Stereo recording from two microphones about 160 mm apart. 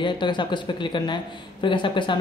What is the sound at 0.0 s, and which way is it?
Speech, 30° left (ahead or behind).